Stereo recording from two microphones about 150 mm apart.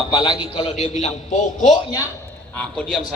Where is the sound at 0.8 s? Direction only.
45° left (ahead or behind).